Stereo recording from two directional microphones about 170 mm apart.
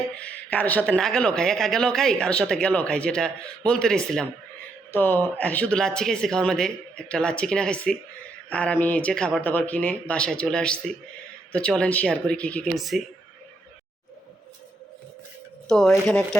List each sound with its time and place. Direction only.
0.2 s speech: 10° left (ahead or behind)
15.9 s speech: 5° left (ahead or behind)